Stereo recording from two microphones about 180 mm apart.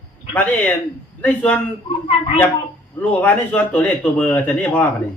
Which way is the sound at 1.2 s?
5° left (ahead or behind).